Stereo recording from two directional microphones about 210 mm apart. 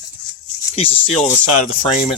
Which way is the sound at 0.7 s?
25° left (ahead or behind).